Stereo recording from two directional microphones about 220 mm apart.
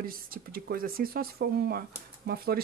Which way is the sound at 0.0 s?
40° right (ahead or behind).